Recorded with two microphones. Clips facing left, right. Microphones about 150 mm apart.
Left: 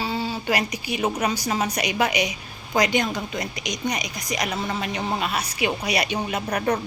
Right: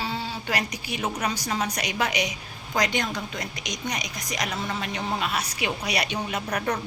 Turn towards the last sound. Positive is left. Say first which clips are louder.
# left 4 dB
turn(degrees=5)  # may be behind; listen again after turning